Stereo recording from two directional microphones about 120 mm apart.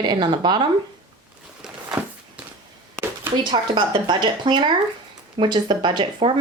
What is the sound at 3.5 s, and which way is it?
Speech, 45° right (ahead or behind).